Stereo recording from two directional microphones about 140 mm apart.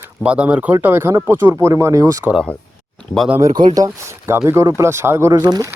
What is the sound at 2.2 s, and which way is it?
Speech, centre (ahead or behind).